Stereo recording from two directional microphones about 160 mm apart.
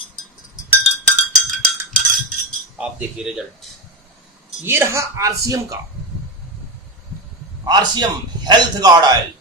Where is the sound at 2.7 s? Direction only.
5° right (ahead or behind).